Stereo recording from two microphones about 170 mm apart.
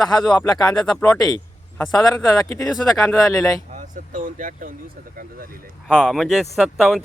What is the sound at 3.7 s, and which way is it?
Speech, 50° right (ahead or behind).